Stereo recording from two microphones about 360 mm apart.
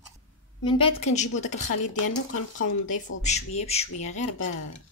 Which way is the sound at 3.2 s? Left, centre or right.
Centre.